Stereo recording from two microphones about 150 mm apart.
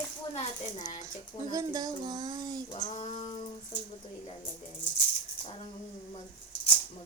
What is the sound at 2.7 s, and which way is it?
Speech, 50° left (ahead or behind).